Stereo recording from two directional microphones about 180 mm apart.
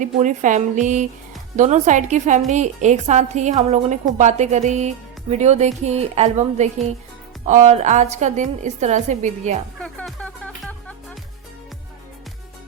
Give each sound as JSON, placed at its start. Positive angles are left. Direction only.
{"t": 0.0, "sound": "a woman's voice", "side_deg": -45}
{"t": 9.8, "sound": "music", "side_deg": 5}